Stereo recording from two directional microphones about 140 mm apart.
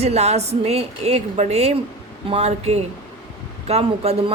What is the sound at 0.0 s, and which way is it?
A woman's voice, 50° right (ahead or behind).